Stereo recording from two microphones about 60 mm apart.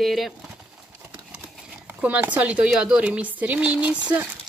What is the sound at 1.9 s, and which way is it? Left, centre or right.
Speech, right.